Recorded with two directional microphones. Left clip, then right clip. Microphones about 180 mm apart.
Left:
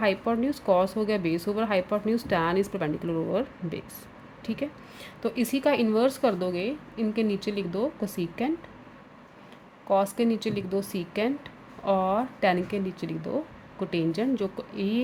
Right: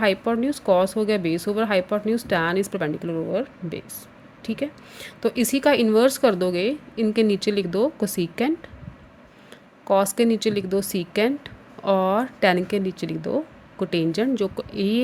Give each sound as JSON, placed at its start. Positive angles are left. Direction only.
{"t": 0.0, "sound": "a woman's voice", "side_deg": -25}
{"t": 9.8, "sound": "speech", "side_deg": -35}